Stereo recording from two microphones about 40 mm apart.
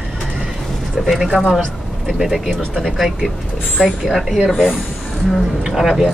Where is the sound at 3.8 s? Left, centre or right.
Right.